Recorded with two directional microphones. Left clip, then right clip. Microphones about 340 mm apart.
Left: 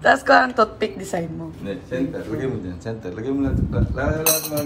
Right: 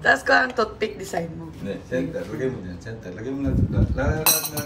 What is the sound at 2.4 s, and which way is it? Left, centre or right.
Speech, centre.